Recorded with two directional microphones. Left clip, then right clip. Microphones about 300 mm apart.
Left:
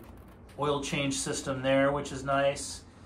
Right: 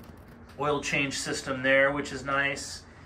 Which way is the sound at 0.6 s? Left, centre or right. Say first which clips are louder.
Right 1 dB; centre.